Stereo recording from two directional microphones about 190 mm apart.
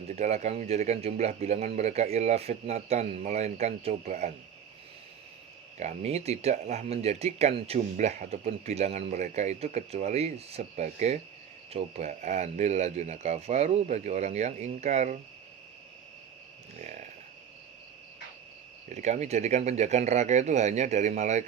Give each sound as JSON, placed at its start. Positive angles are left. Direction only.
{"t": 0.1, "sound": "speech", "side_deg": -35}
{"t": 5.7, "sound": "speech", "side_deg": -35}
{"t": 16.8, "sound": "speech", "side_deg": -40}
{"t": 18.9, "sound": "speech", "side_deg": -40}